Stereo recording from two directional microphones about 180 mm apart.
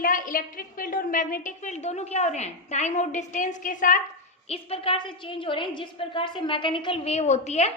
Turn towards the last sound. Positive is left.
turn(degrees=35)  # may be behind; listen again after turning